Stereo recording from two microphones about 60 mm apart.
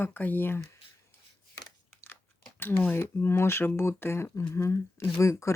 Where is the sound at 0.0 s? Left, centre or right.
Left.